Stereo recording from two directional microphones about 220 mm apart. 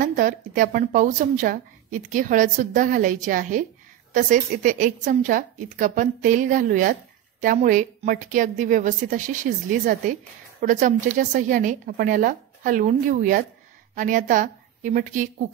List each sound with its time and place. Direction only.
0.0 s a woman's voice: 35° right (ahead or behind)